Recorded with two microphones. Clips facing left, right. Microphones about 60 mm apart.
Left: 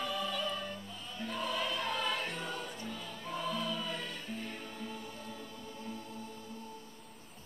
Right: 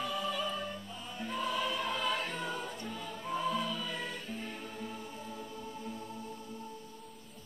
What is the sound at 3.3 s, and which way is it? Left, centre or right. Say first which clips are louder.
Music: right 3 dB; centre.